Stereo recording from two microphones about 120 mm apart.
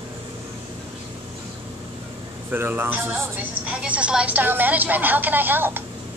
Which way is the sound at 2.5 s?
15° right (ahead or behind).